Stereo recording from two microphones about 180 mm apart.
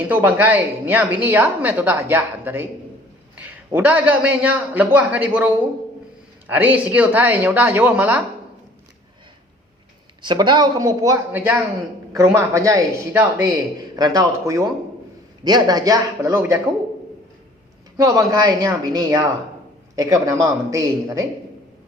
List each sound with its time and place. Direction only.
0.0 s a woman's voice: 10° right (ahead or behind)
10.2 s a woman's voice: 25° right (ahead or behind)
17.9 s speech: 20° right (ahead or behind)